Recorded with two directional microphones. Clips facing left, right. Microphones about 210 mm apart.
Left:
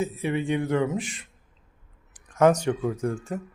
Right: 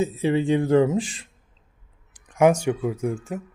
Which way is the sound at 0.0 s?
25° right (ahead or behind).